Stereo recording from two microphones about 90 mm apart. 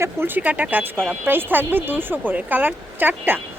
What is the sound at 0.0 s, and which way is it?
Speech, 25° right (ahead or behind).